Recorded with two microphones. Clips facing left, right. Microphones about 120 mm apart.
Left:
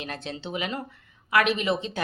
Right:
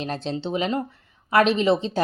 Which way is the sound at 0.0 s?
30° right (ahead or behind).